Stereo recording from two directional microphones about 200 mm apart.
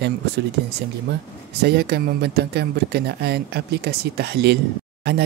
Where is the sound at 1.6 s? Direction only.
55° right (ahead or behind).